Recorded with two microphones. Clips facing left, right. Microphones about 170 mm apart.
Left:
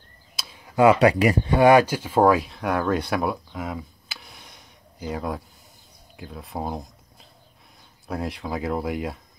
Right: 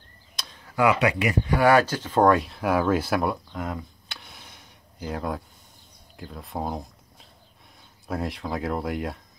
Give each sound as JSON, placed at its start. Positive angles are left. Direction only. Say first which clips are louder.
{"t": 0.4, "sound": "a sound", "louder": "left 1 dB", "side_deg": 10}
{"t": 0.7, "sound": "speech", "louder": "left 5 dB", "side_deg": 30}
{"t": 1.5, "sound": "speech", "louder": "left 3 dB", "side_deg": 20}
{"t": 8.1, "sound": "speech", "louder": "even", "side_deg": 0}